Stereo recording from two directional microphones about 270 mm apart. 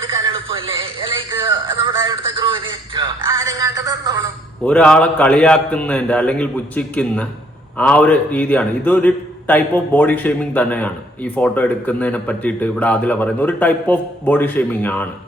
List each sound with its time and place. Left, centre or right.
0.2 s music: centre
4.6 s a man's voice: centre